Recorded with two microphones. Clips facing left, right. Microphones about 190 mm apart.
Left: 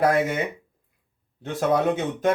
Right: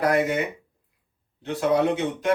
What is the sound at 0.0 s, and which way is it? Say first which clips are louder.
Speech: left 1 dB; 50° left (ahead or behind).